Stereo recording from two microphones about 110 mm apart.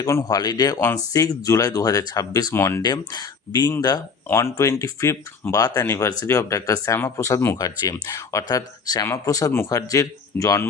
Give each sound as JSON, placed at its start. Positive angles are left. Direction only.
{"t": 0.0, "sound": "speech", "side_deg": 30}
{"t": 2.8, "sound": "speech", "side_deg": 40}
{"t": 4.3, "sound": "speech", "side_deg": 25}